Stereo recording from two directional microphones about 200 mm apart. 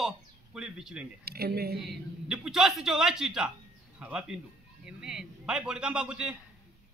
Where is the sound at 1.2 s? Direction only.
50° right (ahead or behind).